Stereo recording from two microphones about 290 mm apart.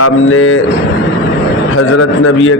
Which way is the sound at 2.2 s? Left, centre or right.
Left.